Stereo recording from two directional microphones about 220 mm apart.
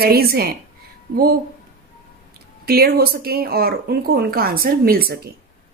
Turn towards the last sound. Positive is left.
turn(degrees=-45)  # may be behind; listen again after turning